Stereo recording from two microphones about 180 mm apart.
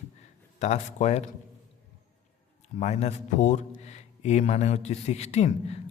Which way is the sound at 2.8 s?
40° left (ahead or behind).